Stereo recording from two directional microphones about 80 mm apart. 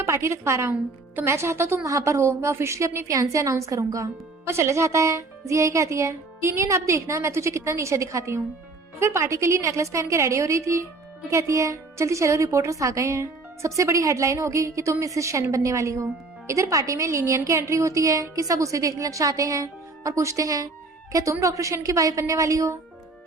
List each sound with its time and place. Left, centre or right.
0.0 s speech: right
0.7 s a woman's voice: right
1.3 s a woman's voice: right